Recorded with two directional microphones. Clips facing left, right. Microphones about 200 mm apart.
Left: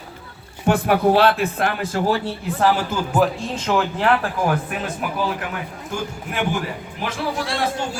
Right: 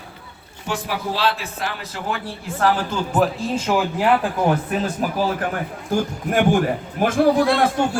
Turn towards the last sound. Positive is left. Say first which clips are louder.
# right 6 dB
turn(degrees=-55)  # may be behind; listen again after turning